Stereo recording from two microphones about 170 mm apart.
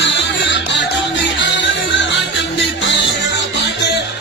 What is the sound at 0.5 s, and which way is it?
Music, 90° left.